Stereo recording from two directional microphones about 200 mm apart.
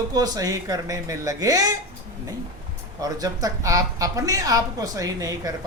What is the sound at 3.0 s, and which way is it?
Speech, 15° right (ahead or behind).